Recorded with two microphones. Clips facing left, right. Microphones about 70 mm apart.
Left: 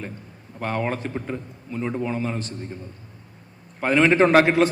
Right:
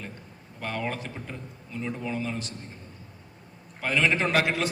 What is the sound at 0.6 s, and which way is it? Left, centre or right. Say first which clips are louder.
A man's voice: left 6 dB; left.